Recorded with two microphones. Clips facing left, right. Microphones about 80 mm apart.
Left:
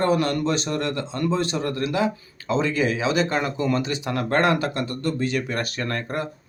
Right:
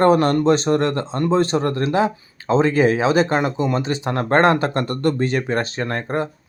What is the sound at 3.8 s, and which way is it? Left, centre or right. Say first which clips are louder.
A man's voice: right 4 dB; right.